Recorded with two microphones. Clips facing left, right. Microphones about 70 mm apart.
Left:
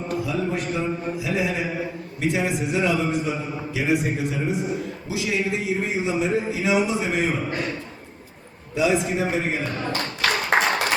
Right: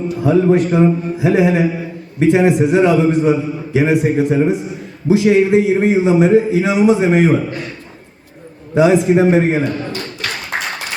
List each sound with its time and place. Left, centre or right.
0.2 s a man's voice: right
8.7 s a man's voice: right